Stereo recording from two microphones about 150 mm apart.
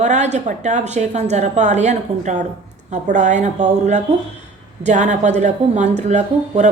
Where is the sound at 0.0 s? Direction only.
50° right (ahead or behind).